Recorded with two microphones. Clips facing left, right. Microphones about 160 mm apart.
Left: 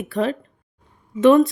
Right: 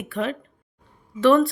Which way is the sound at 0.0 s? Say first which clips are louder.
Left 4 dB; 35° left (ahead or behind).